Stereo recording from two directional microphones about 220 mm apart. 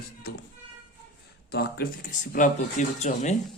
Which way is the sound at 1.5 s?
45° left (ahead or behind).